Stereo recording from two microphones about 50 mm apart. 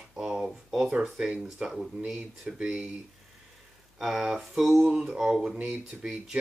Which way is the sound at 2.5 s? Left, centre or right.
Right.